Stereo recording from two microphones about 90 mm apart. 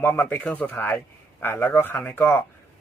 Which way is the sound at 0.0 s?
20° left (ahead or behind).